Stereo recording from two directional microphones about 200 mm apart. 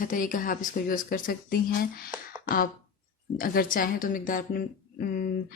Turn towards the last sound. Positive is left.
turn(degrees=45)  # may be behind; listen again after turning